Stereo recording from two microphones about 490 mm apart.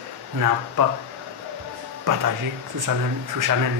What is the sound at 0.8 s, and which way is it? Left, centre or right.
Speech, right.